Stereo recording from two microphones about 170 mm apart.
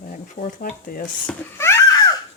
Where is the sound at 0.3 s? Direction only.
50° left (ahead or behind).